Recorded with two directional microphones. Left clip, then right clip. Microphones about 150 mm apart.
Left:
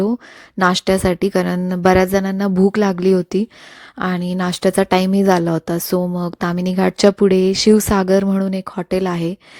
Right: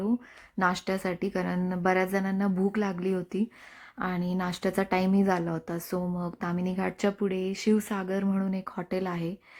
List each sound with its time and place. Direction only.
0.6 s speech: 45° left (ahead or behind)